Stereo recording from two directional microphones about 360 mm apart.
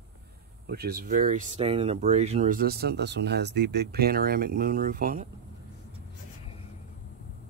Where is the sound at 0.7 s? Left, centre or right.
Right.